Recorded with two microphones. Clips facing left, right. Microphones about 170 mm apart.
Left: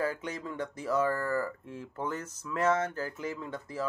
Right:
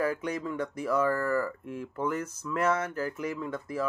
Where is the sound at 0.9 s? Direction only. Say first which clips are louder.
Right 2 dB; 25° left (ahead or behind).